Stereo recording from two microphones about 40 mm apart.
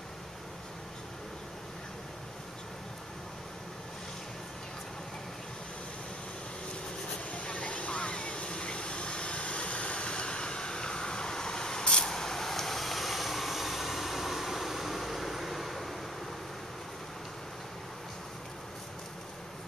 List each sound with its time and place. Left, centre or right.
7.2 s vehicle: left; by 16.0 s centre